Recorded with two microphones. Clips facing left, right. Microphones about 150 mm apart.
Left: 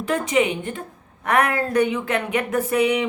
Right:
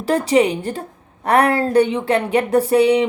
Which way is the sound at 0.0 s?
35° right (ahead or behind).